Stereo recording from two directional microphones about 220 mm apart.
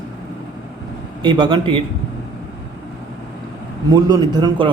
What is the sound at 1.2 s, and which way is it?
Speech, 20° right (ahead or behind).